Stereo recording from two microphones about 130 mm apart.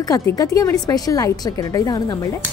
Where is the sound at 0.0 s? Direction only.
30° left (ahead or behind).